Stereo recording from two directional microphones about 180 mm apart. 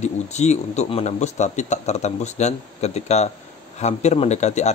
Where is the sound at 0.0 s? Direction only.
40° left (ahead or behind).